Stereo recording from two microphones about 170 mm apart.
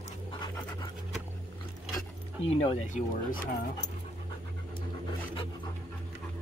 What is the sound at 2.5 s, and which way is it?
Speech, 35° left (ahead or behind).